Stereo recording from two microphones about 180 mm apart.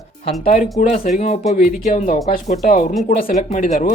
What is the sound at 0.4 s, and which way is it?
Speech, 40° left (ahead or behind).